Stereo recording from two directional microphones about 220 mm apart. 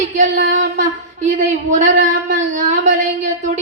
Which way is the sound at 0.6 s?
35° right (ahead or behind).